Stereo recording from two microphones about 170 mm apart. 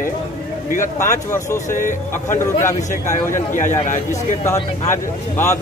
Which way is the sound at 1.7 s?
50° left (ahead or behind).